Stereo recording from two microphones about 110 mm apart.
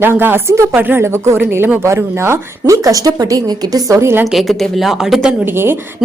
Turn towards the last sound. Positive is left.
turn(degrees=-20)  # may be behind; listen again after turning